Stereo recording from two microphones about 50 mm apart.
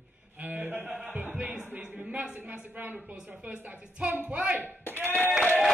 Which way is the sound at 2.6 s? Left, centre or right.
Right.